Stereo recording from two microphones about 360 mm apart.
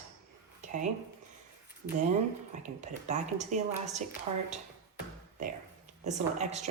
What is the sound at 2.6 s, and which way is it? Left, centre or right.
Speech, centre.